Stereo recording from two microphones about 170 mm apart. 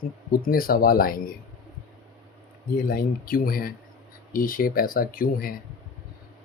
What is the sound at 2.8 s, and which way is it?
Speech, 60° left (ahead or behind).